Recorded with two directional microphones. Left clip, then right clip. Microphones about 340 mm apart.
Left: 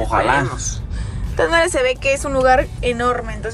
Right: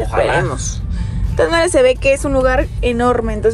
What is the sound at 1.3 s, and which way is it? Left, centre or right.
Speech, centre.